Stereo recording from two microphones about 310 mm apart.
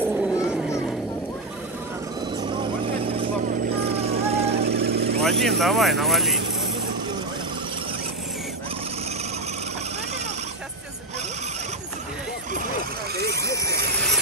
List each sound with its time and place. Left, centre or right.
0.0 s a sound: centre
3.1 s vehicle: centre
3.7 s vehicle: right
4.0 s vehicle: centre
4.6 s vehicle: right
5.2 s speech: centre